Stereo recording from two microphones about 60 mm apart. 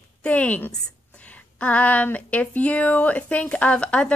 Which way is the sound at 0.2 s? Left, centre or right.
Left.